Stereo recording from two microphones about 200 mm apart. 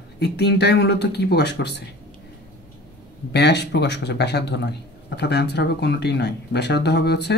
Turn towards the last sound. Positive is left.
turn(degrees=55)  # may be behind; listen again after turning